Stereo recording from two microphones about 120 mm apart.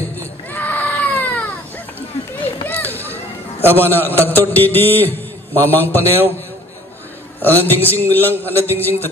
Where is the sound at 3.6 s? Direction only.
15° left (ahead or behind).